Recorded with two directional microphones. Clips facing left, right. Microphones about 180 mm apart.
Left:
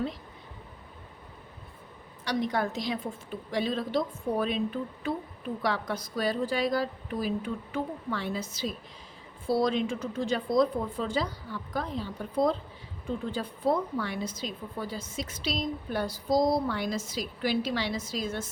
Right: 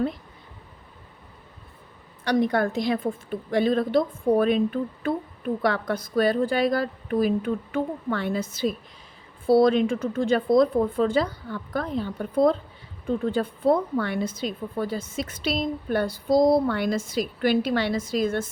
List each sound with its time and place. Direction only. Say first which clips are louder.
2.2 s a woman's voice: right 7 dB; 55° right (ahead or behind)